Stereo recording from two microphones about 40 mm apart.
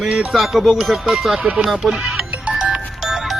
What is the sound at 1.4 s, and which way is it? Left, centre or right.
Speech, right.